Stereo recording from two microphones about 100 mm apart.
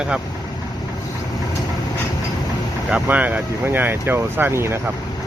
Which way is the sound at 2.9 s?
15° right (ahead or behind).